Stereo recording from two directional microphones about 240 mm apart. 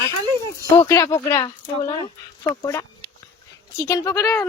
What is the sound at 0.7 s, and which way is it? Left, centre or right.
Speech, centre.